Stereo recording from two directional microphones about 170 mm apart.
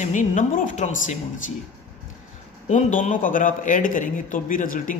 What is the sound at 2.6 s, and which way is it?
A man's voice, 45° left (ahead or behind).